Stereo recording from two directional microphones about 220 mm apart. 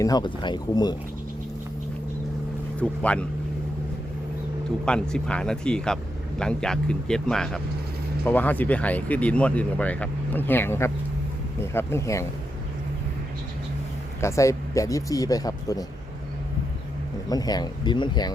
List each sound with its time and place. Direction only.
0.0 s speech: 20° left (ahead or behind)
2.8 s speech: 5° left (ahead or behind)
4.9 s speech: 5° left (ahead or behind)
14.2 s speech: 15° left (ahead or behind)
17.2 s speech: 15° left (ahead or behind)